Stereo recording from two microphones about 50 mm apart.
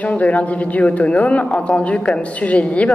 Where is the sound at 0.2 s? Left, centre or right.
Left.